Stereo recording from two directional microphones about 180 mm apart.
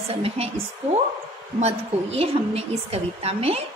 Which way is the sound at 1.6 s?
35° right (ahead or behind).